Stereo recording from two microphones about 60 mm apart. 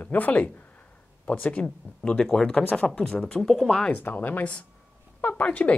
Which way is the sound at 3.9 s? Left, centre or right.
Left.